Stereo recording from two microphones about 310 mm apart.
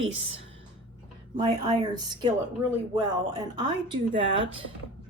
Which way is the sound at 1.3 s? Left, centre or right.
Centre.